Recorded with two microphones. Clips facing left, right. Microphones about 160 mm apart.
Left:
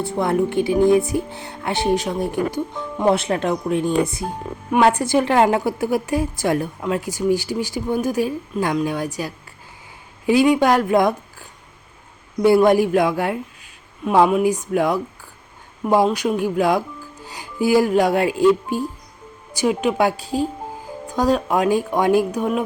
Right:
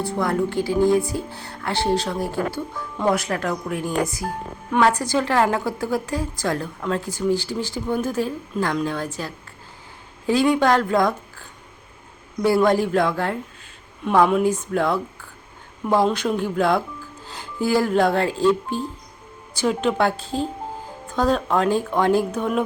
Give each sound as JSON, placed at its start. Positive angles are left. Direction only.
{"t": 0.0, "sound": "a woman's voice", "side_deg": 20}